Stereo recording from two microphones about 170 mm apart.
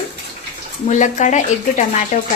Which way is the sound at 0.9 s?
45° left (ahead or behind).